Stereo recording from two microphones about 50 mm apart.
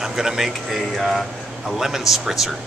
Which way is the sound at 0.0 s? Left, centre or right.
Centre.